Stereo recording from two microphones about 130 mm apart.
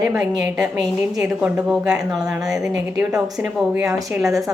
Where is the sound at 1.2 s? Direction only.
10° right (ahead or behind).